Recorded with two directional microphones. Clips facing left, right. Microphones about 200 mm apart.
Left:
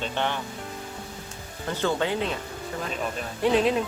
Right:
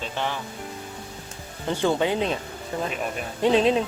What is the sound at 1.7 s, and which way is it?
Speech, 15° right (ahead or behind).